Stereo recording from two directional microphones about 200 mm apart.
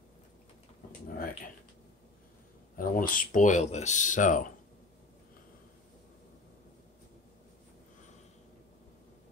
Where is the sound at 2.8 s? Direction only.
45° left (ahead or behind).